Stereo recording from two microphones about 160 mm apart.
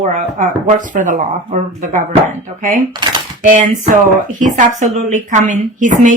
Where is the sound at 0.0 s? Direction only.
50° right (ahead or behind).